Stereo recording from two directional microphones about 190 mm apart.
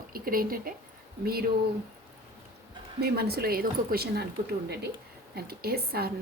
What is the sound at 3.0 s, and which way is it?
A woman's voice, 55° right (ahead or behind).